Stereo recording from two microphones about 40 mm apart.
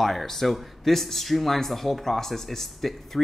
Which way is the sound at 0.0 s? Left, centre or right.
Centre.